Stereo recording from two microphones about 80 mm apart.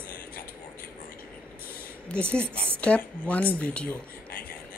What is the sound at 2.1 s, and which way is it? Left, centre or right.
Speech, centre.